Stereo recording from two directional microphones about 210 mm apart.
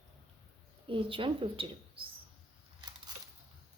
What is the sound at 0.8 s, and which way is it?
Speech, 25° right (ahead or behind).